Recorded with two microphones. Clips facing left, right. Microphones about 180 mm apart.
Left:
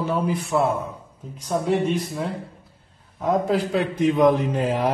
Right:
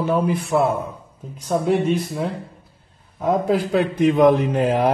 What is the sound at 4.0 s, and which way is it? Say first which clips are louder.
Speech: right 3 dB; 60° right (ahead or behind).